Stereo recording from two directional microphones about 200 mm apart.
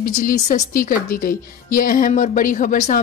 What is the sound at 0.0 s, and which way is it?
Speech, 45° left (ahead or behind).